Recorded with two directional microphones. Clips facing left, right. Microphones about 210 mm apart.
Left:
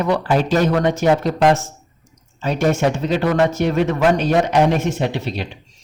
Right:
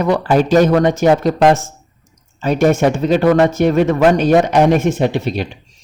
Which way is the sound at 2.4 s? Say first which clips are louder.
Right 5 dB; 50° right (ahead or behind).